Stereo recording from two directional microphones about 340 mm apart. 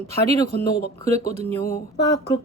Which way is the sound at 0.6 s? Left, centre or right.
Left.